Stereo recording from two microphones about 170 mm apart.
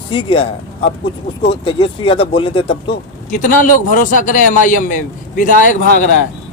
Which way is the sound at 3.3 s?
50° left (ahead or behind).